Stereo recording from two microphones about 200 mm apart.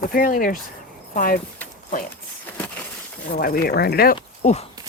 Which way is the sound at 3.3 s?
45° left (ahead or behind).